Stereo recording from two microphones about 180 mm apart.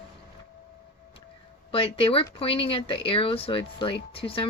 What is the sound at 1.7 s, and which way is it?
Speech, 30° left (ahead or behind).